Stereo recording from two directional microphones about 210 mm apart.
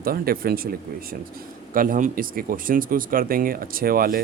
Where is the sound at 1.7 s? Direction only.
40° right (ahead or behind).